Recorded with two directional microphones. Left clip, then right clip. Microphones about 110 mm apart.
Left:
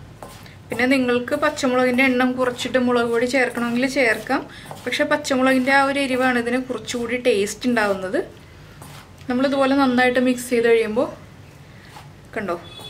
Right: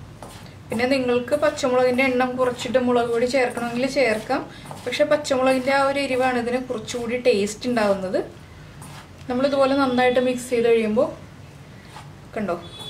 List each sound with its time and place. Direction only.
0.7 s a woman's voice: 20° left (ahead or behind)
9.3 s a woman's voice: 25° left (ahead or behind)
12.4 s a woman's voice: 25° left (ahead or behind)